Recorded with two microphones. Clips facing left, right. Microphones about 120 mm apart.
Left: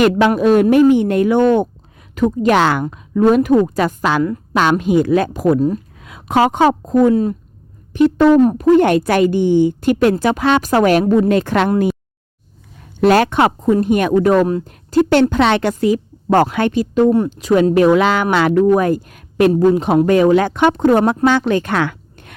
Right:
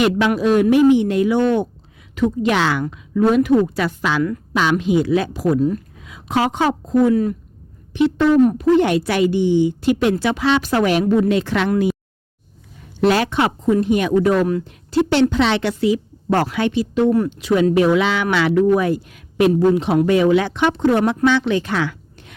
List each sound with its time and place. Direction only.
0.0 s a woman's voice: 55° left (ahead or behind)
6.0 s a woman's voice: 55° left (ahead or behind)
7.1 s a woman's voice: 25° left (ahead or behind)
7.9 s a woman's voice: 45° left (ahead or behind)
11.0 s speech: 30° left (ahead or behind)
11.3 s a woman's voice: 50° left (ahead or behind)
13.0 s a woman's voice: 50° left (ahead or behind)
21.0 s speech: 35° left (ahead or behind)
21.2 s a woman's voice: 45° left (ahead or behind)